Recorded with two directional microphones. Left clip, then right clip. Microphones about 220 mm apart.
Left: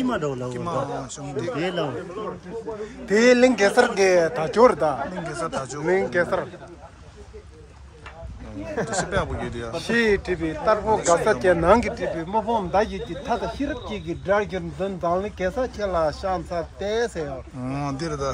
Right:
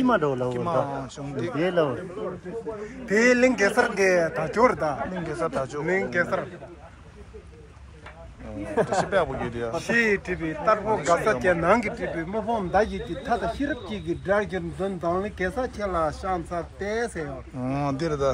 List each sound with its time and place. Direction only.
0.1 s speech: 25° right (ahead or behind)
0.5 s a man's voice: 5° left (ahead or behind)
1.6 s speech: 20° right (ahead or behind)
3.1 s a man's voice: 40° left (ahead or behind)
5.2 s a man's voice: centre (ahead or behind)
5.9 s a man's voice: 40° left (ahead or behind)
9.1 s a man's voice: 5° left (ahead or behind)
9.8 s a man's voice: 45° left (ahead or behind)
12.4 s speech: 15° left (ahead or behind)
15.8 s speech: 25° left (ahead or behind)
17.6 s a man's voice: 5° left (ahead or behind)